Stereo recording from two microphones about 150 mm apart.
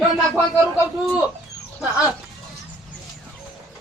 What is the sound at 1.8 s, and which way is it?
Speech, 5° right (ahead or behind).